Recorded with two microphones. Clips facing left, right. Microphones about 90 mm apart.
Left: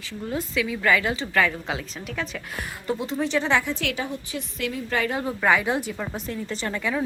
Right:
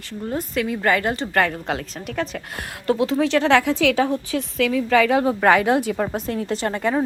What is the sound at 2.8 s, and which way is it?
Speech, 90° right.